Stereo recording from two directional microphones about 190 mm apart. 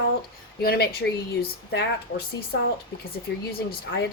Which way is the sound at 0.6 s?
55° left (ahead or behind).